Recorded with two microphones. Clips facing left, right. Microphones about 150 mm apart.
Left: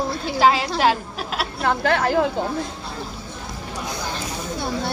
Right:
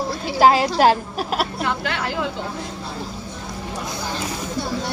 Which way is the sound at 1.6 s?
45° left (ahead or behind).